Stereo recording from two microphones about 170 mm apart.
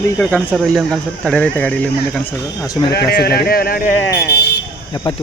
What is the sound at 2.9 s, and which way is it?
Speech, 70° left (ahead or behind).